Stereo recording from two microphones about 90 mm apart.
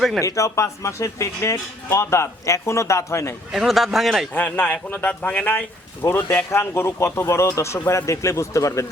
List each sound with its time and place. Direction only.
0.2 s speech: 35° left (ahead or behind)
3.5 s speech: centre (ahead or behind)
4.4 s speech: 20° left (ahead or behind)